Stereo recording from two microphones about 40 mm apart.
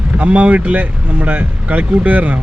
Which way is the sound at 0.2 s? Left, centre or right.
Right.